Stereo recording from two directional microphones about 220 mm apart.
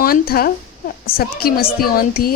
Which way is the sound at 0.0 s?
40° left (ahead or behind).